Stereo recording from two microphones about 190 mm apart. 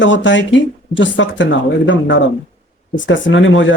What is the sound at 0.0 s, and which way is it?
Speech, 75° left (ahead or behind).